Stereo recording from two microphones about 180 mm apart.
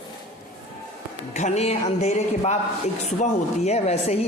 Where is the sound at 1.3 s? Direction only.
40° left (ahead or behind).